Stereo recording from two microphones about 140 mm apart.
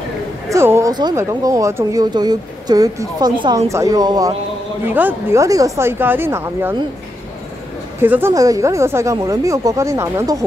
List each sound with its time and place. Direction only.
0.5 s a sound: 20° right (ahead or behind)
1.1 s speech: 25° right (ahead or behind)
4.8 s speech: 15° right (ahead or behind)
5.4 s speech: 25° right (ahead or behind)
8.0 s speech: 15° right (ahead or behind)